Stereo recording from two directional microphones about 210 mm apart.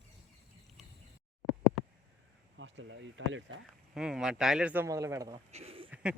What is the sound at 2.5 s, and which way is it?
Speech, 60° right (ahead or behind).